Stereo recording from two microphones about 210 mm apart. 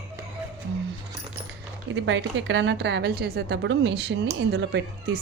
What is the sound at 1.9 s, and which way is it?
A woman's voice, 60° right (ahead or behind).